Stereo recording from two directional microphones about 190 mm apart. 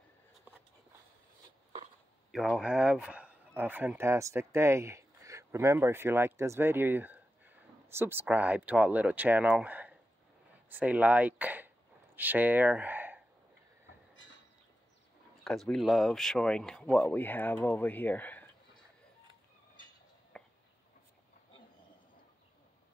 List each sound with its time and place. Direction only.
2.3 s a man's voice: centre (ahead or behind)
15.4 s speech: centre (ahead or behind)
20.3 s a sound: 5° left (ahead or behind)